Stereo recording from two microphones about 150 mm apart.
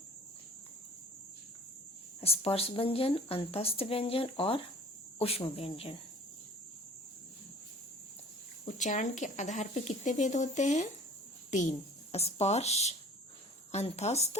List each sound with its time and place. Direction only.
2.2 s a woman's voice: 40° left (ahead or behind)
8.6 s speech: 55° left (ahead or behind)
12.1 s speech: 45° left (ahead or behind)